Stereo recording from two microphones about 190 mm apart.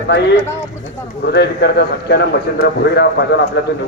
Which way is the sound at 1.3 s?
60° left (ahead or behind).